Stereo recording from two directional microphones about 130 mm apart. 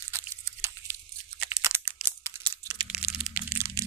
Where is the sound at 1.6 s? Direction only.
20° right (ahead or behind).